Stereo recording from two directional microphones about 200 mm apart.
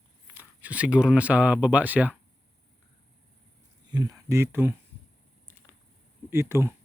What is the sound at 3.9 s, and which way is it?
Speech, 20° right (ahead or behind).